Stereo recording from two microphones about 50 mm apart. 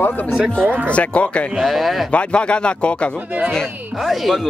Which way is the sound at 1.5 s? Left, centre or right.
Centre.